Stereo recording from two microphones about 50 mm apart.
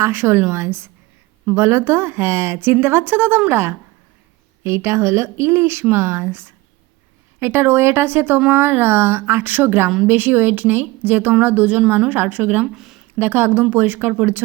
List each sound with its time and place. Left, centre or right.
0.0 s speech: right
12.7 s speech: centre
13.1 s speech: right